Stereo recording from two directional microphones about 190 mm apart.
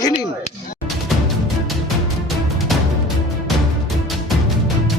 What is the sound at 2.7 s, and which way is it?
Music, centre (ahead or behind).